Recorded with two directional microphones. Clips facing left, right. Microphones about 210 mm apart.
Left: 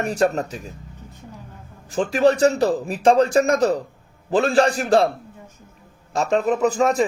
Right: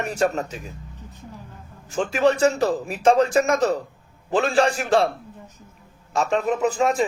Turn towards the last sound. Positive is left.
turn(degrees=40)  # may be behind; listen again after turning